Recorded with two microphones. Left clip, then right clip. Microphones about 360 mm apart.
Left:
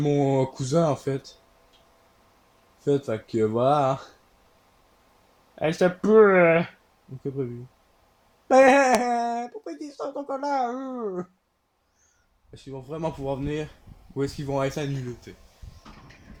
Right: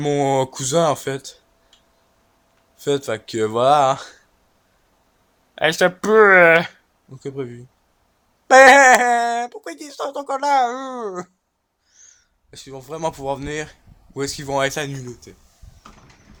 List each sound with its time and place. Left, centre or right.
0.0 s speech: right
2.8 s speech: right
5.5 s speech: right
8.4 s speech: right
9.5 s speech: right
12.5 s speech: right; by 15.3 s centre